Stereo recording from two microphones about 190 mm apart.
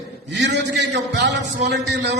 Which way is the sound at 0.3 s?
65° right (ahead or behind).